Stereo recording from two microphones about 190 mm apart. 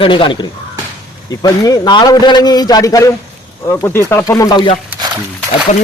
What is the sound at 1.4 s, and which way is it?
Speech, 20° left (ahead or behind).